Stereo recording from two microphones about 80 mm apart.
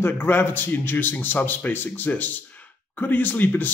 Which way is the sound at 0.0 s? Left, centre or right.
Left.